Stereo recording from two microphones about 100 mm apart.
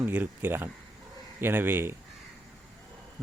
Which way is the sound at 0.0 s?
20° right (ahead or behind).